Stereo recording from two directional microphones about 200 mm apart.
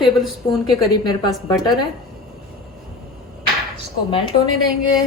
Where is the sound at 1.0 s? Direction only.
20° left (ahead or behind).